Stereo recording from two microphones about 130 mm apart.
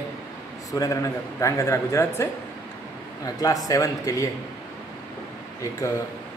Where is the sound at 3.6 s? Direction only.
25° left (ahead or behind).